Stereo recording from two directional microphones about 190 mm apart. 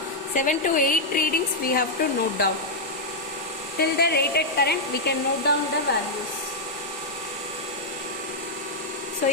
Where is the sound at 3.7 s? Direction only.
55° left (ahead or behind).